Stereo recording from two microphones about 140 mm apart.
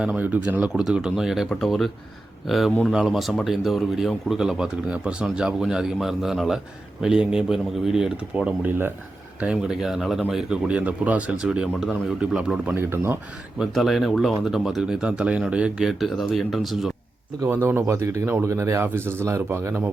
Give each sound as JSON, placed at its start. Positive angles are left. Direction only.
{"t": 0.0, "sound": "speech", "side_deg": -10}
{"t": 13.6, "sound": "speech", "side_deg": 0}
{"t": 17.4, "sound": "speech", "side_deg": -15}